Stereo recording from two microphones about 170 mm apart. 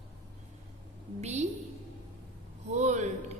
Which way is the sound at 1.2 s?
40° right (ahead or behind).